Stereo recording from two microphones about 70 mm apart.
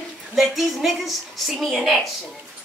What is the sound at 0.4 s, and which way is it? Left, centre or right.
A woman's voice, centre.